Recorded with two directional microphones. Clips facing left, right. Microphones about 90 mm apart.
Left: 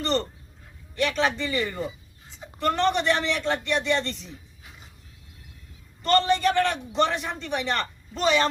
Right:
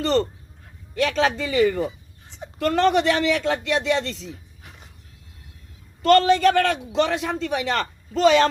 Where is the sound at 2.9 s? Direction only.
90° right.